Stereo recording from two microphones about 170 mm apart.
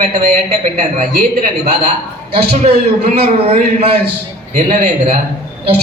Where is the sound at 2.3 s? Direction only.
35° right (ahead or behind).